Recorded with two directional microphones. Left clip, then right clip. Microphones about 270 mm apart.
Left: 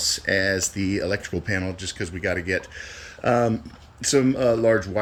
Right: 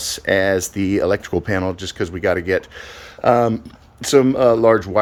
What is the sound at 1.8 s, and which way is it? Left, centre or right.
Speech, right.